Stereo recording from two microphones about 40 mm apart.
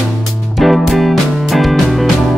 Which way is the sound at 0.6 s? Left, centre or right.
Centre.